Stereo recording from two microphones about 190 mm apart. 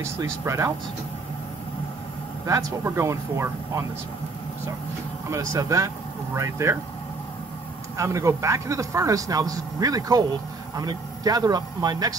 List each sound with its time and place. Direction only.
0.0 s speech: 15° right (ahead or behind)
2.4 s speech: 15° right (ahead or behind)
5.5 s speech: 15° right (ahead or behind)
8.0 s speech: 15° right (ahead or behind)